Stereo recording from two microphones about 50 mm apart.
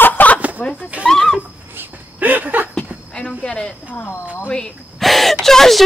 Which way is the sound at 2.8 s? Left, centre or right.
Centre.